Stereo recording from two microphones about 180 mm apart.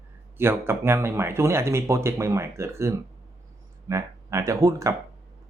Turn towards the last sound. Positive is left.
turn(degrees=-15)  # may be behind; listen again after turning